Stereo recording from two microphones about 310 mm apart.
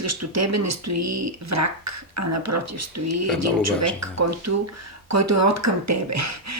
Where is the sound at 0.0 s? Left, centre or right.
Right.